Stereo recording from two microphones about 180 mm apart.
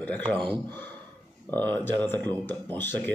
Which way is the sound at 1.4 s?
10° left (ahead or behind).